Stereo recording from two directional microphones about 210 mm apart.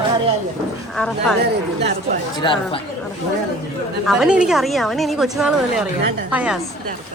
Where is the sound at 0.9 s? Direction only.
5° left (ahead or behind).